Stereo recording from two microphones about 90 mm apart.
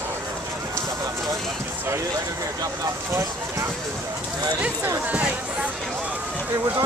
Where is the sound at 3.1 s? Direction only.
35° right (ahead or behind).